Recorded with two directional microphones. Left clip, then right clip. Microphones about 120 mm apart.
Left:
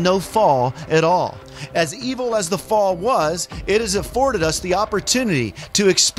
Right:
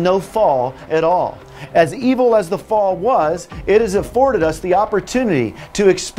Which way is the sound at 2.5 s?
45° left (ahead or behind).